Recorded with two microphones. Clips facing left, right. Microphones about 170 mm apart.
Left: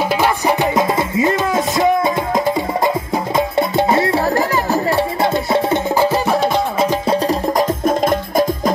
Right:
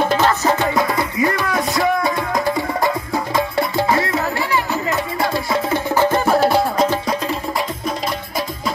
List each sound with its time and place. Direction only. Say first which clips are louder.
0.1 s music: left 1 dB; 15° left (ahead or behind)
5.9 s music: right 3 dB; 5° left (ahead or behind)
7.1 s music: left 6 dB; 40° left (ahead or behind)